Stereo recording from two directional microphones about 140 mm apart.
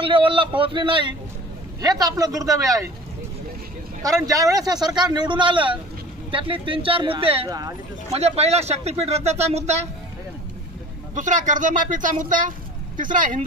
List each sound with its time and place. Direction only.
0.0 s speech: 40° right (ahead or behind)
4.0 s speech: 25° right (ahead or behind); by 7.4 s 40° right (ahead or behind)
7.4 s speech: 25° right (ahead or behind)
8.1 s speech: 50° right (ahead or behind)
11.1 s speech: 65° right (ahead or behind)